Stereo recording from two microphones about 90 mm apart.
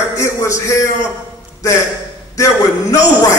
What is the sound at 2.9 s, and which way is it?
Speech, 35° left (ahead or behind).